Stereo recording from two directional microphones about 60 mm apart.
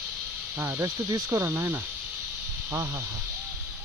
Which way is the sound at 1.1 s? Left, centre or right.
Right.